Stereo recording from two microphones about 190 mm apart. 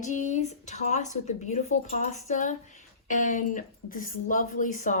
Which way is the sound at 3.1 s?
40° left (ahead or behind).